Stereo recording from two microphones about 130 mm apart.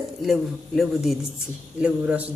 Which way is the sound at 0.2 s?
Centre (ahead or behind).